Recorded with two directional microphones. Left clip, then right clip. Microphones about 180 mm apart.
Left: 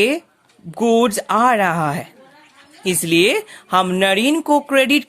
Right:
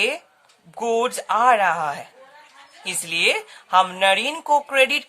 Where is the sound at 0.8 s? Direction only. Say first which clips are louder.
Left 6 dB; 35° left (ahead or behind).